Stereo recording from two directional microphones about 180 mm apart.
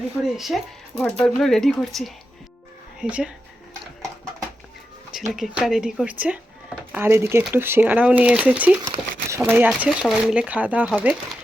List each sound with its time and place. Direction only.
0.3 s speech: centre (ahead or behind)
5.3 s speech: centre (ahead or behind)
8.8 s speech: 20° right (ahead or behind)
9.4 s speech: 10° right (ahead or behind)